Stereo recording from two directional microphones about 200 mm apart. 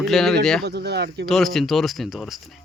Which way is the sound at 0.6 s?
55° right (ahead or behind).